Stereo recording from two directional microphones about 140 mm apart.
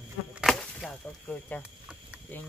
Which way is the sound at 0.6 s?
5° left (ahead or behind).